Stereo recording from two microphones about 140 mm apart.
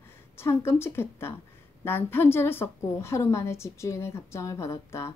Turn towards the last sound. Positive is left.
turn(degrees=20)  # may be behind; listen again after turning